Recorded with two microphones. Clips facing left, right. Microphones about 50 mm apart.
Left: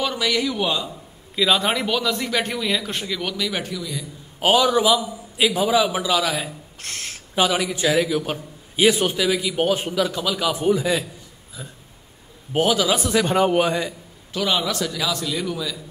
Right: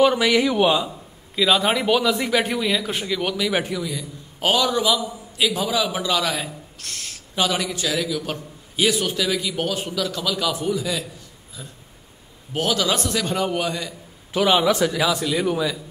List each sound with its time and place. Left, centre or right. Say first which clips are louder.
0.0 s a man's voice: right 6 dB; right
0.8 s a man's voice: even; centre
4.4 s a man's voice: left 3 dB; centre
6.8 s a sound: left 3 dB; left
7.3 s a man's voice: left 2 dB; centre
7.7 s a man's voice: left 5 dB; left
9.2 s a man's voice: left 2 dB; centre
9.6 s a man's voice: left 4 dB; left
10.5 s a man's voice: left 4 dB; left
12.5 s a man's voice: left 3 dB; centre
13.1 s a man's voice: left 5 dB; left
14.3 s a man's voice: right 5 dB; right